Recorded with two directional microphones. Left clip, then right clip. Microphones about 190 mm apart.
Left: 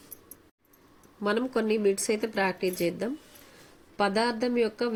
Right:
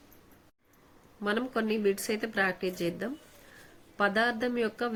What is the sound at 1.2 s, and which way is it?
A woman's voice, 15° left (ahead or behind).